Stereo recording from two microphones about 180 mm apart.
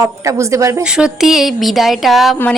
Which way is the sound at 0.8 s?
5° right (ahead or behind).